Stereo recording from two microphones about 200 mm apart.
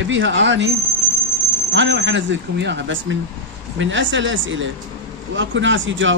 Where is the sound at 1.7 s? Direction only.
65° right (ahead or behind).